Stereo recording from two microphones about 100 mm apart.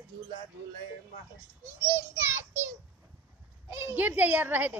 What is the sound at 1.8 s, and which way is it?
Speech, 30° right (ahead or behind).